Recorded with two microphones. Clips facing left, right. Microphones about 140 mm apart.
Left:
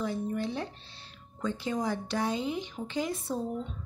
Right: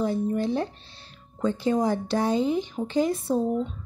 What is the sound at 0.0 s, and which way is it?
A woman's voice, 35° right (ahead or behind).